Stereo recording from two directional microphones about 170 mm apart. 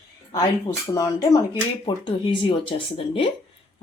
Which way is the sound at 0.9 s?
20° left (ahead or behind).